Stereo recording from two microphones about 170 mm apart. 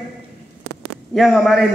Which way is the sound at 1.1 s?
Centre (ahead or behind).